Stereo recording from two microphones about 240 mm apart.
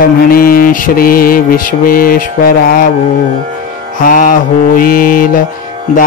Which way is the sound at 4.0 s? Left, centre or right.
Left.